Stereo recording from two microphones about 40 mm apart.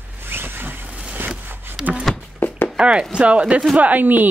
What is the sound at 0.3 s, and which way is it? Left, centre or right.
Vehicle, right.